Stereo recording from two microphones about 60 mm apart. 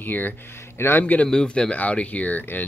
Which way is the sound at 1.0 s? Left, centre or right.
Left.